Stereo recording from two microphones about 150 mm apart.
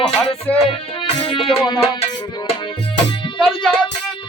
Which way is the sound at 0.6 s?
40° left (ahead or behind).